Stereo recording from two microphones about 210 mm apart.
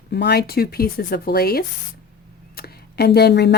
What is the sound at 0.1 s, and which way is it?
Speech, 50° left (ahead or behind).